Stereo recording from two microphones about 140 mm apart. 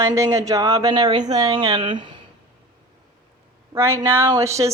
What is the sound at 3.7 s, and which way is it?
A woman's voice, 20° right (ahead or behind).